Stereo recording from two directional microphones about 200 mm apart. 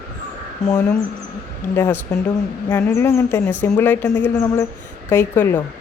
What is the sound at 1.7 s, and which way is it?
Speech, 10° left (ahead or behind).